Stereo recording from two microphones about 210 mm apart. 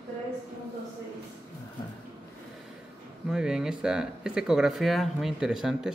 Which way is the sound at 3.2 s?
5° right (ahead or behind).